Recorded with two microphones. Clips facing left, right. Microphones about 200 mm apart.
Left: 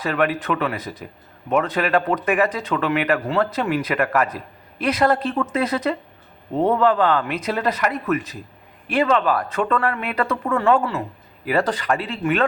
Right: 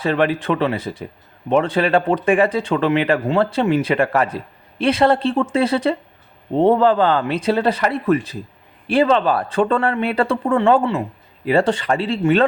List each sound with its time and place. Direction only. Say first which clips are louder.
0.0 s speech: right 3 dB; 25° right (ahead or behind)